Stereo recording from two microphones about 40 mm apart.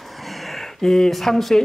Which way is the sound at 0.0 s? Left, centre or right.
Centre.